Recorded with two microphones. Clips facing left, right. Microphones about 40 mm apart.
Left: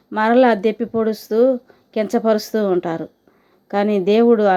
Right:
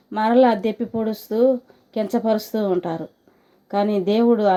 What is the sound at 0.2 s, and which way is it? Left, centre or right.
A woman's voice, left.